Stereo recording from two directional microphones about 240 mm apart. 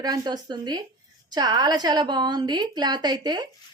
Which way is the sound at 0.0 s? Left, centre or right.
Centre.